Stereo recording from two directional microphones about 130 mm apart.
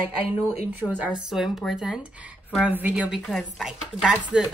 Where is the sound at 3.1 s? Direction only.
Centre (ahead or behind).